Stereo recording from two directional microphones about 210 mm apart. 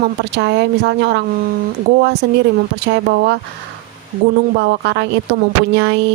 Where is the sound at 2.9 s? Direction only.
55° right (ahead or behind).